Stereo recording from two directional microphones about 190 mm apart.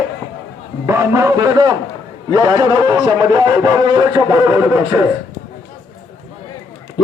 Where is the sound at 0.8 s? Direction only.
15° right (ahead or behind).